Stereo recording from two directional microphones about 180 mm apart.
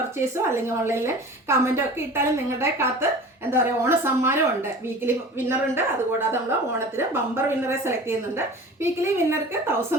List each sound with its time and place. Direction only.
0.2 s a woman's voice: 15° right (ahead or behind)